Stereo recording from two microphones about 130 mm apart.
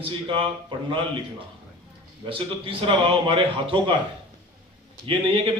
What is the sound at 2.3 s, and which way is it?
A man's voice, 45° right (ahead or behind).